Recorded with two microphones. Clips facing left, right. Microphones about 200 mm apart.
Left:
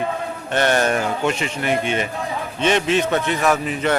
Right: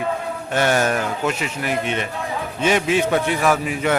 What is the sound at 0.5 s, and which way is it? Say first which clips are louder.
A man's voice: left 1 dB; 5° right (ahead or behind).